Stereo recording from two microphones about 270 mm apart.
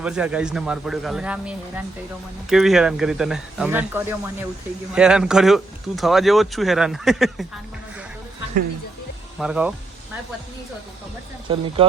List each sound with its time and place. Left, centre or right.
0.0 s speech: centre
9.4 s speech: centre
11.5 s speech: centre